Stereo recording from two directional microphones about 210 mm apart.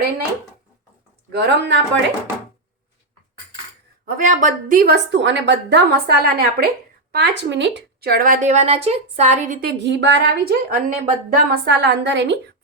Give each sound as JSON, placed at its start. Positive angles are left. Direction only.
{"t": 1.3, "sound": "speech", "side_deg": -55}
{"t": 4.0, "sound": "a woman's voice", "side_deg": -40}